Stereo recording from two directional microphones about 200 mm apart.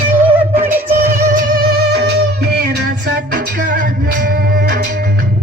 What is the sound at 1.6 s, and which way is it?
Music, 55° right (ahead or behind).